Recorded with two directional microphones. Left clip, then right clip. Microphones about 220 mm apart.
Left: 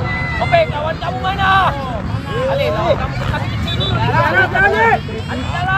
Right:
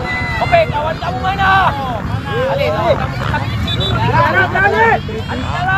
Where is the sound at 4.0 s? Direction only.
40° left (ahead or behind).